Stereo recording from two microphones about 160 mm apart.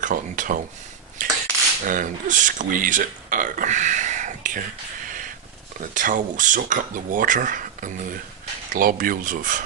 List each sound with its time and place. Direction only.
0.0 s speech: 55° right (ahead or behind)
1.2 s cutlery: 55° right (ahead or behind)
1.8 s speech: 55° right (ahead or behind)
5.9 s speech: 55° right (ahead or behind)